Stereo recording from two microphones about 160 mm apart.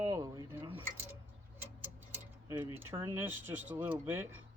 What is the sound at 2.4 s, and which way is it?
Speech, 15° right (ahead or behind).